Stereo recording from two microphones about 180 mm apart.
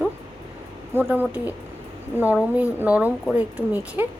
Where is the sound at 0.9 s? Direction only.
10° right (ahead or behind).